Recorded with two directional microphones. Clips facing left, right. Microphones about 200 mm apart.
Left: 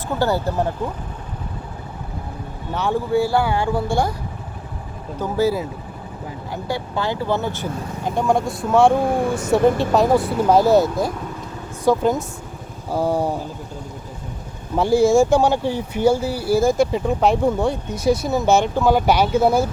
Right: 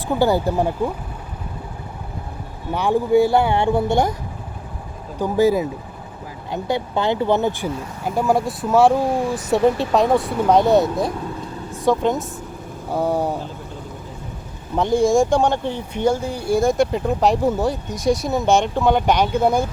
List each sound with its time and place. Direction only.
0.1 s speech: 15° right (ahead or behind)
2.7 s speech: 15° right (ahead or behind)
5.2 s speech: 15° right (ahead or behind); by 13.4 s centre (ahead or behind)
14.8 s speech: 5° left (ahead or behind)